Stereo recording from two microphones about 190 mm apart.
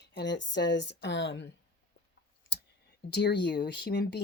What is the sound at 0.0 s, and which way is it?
A woman's voice, 60° left (ahead or behind).